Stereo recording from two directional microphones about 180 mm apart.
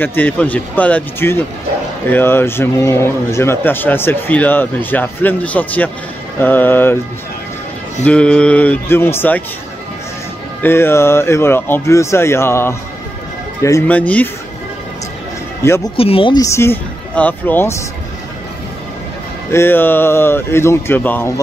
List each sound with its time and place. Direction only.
0.0 s speech: 10° left (ahead or behind)
8.0 s speech: 5° left (ahead or behind)
10.6 s speech: 15° left (ahead or behind)
15.6 s speech: 15° left (ahead or behind)
16.0 s speech: 30° left (ahead or behind)
16.4 s speech: 15° left (ahead or behind)
19.5 s speech: 10° left (ahead or behind)